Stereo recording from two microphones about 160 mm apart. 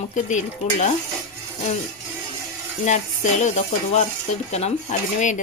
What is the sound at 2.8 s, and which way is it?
Speech, 50° left (ahead or behind).